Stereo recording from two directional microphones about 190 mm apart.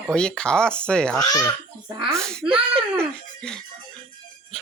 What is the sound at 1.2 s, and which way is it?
Speech, 20° left (ahead or behind).